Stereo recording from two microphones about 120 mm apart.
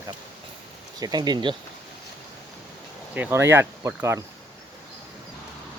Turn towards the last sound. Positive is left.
turn(degrees=-25)  # may be behind; listen again after turning